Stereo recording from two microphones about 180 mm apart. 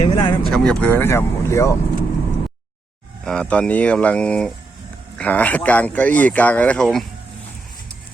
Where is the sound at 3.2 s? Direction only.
5° left (ahead or behind).